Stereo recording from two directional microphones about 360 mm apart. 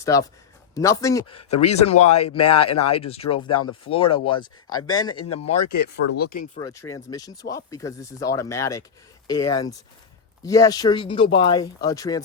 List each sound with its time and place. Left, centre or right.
0.0 s speech: centre
5.1 s speech: left
6.1 s speech: left
6.6 s speech: centre